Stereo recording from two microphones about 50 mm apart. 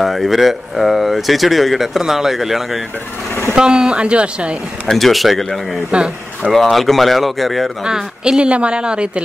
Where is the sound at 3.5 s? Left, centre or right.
Centre.